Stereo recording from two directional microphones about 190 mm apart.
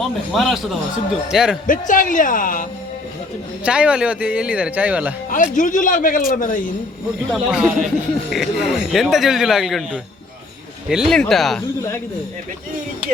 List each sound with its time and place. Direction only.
0.0 s speech: centre (ahead or behind)
1.6 s speech: 45° left (ahead or behind)
3.6 s speech: 5° right (ahead or behind)
5.3 s speech: 45° left (ahead or behind)
7.3 s speech: centre (ahead or behind)